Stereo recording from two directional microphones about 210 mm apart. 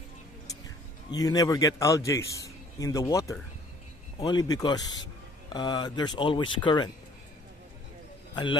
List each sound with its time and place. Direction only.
1.1 s a man's voice: 15° left (ahead or behind)